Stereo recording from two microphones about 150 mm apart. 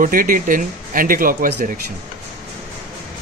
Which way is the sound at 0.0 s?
65° right (ahead or behind).